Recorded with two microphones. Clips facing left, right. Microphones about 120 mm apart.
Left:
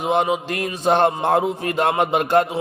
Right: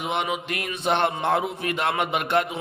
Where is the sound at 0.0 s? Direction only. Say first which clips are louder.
Left 7 dB; 35° left (ahead or behind).